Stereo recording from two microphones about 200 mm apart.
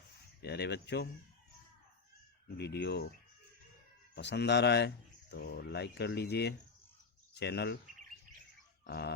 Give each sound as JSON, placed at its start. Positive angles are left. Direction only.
{"t": 0.4, "sound": "speech", "side_deg": 55}
{"t": 2.6, "sound": "speech", "side_deg": 55}
{"t": 4.1, "sound": "speech", "side_deg": 60}
{"t": 8.9, "sound": "speech", "side_deg": 55}